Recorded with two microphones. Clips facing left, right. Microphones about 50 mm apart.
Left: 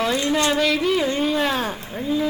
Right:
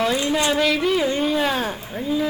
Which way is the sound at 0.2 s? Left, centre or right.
Centre.